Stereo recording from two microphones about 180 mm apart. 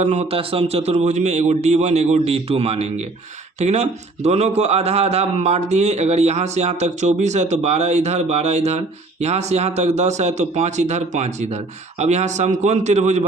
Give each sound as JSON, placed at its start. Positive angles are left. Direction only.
{"t": 0.0, "sound": "a man's voice", "side_deg": -40}